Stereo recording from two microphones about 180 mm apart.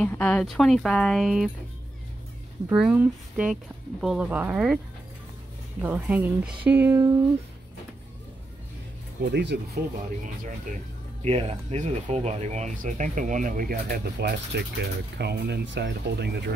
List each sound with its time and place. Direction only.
0.0 s speech: 5° left (ahead or behind)
2.7 s speech: 5° right (ahead or behind)
5.8 s speech: 10° right (ahead or behind)
9.3 s speech: 70° right (ahead or behind)
11.2 s speech: 35° right (ahead or behind); by 14.3 s 60° right (ahead or behind)
14.5 s speech: 70° right (ahead or behind)